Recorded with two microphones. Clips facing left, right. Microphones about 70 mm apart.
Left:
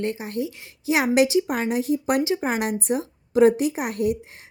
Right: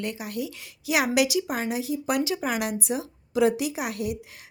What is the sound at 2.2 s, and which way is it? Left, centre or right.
A woman's voice, left.